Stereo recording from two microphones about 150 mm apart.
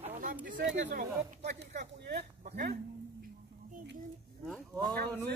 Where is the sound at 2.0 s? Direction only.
90° right.